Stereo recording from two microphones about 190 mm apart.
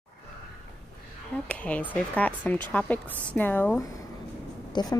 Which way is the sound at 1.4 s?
5° left (ahead or behind).